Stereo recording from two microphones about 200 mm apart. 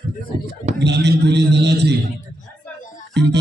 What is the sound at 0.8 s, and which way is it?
A man's voice, 60° right (ahead or behind).